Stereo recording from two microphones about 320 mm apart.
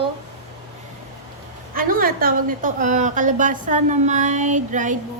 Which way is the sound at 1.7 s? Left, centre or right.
Right.